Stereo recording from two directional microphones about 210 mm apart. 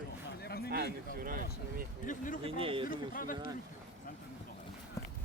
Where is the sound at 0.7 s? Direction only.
50° right (ahead or behind).